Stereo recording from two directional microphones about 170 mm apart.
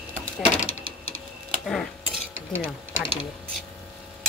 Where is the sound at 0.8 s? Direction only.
60° right (ahead or behind).